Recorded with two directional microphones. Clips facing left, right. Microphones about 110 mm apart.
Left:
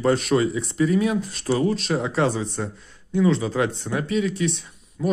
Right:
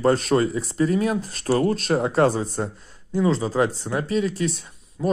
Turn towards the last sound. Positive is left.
turn(degrees=-30)  # may be behind; listen again after turning